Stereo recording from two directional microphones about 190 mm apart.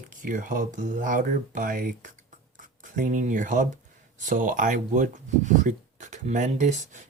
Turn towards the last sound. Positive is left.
turn(degrees=-40)  # may be behind; listen again after turning